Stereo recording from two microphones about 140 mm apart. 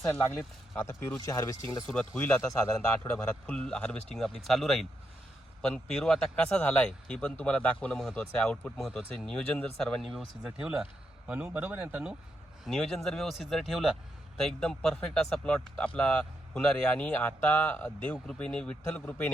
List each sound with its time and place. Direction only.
0.1 s speech: 15° left (ahead or behind)
1.9 s speech: 10° left (ahead or behind); by 12.1 s 10° right (ahead or behind)
12.6 s speech: 5° left (ahead or behind)